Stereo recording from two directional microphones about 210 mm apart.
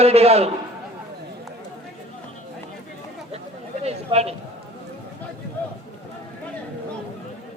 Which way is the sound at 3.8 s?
30° right (ahead or behind).